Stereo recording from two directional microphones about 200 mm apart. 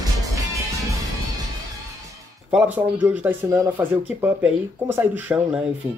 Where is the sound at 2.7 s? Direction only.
10° right (ahead or behind).